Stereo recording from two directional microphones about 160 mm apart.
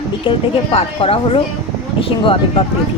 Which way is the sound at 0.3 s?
35° left (ahead or behind).